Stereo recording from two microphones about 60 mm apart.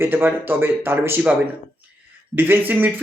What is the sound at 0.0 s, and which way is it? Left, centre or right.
Speech, right.